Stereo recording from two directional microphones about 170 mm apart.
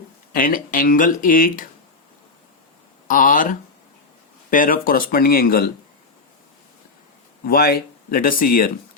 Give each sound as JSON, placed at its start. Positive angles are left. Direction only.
{"t": 0.3, "sound": "speech", "side_deg": 55}
{"t": 3.1, "sound": "speech", "side_deg": 50}
{"t": 7.4, "sound": "speech", "side_deg": 65}